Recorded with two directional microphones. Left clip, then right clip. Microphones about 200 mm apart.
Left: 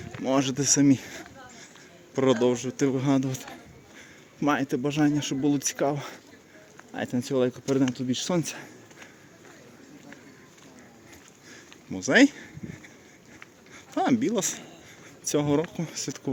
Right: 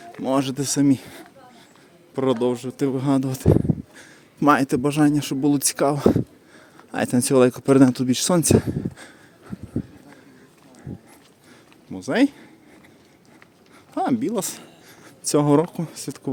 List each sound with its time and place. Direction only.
0.1 s a man's voice: 20° right (ahead or behind)
11.9 s a sound: 10° right (ahead or behind)
13.9 s speech: 10° right (ahead or behind); by 15.6 s 35° right (ahead or behind)
15.7 s speech: 20° right (ahead or behind)